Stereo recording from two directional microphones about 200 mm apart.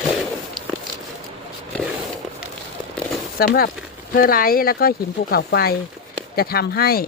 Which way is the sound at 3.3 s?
50° left (ahead or behind).